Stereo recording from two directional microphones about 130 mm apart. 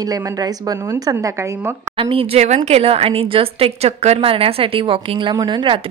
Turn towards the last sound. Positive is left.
turn(degrees=-40)  # may be behind; listen again after turning